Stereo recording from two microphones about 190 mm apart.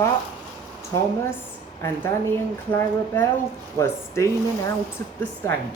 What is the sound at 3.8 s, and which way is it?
Speech, 15° left (ahead or behind).